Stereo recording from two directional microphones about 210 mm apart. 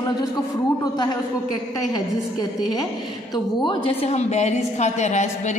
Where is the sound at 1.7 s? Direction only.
20° left (ahead or behind).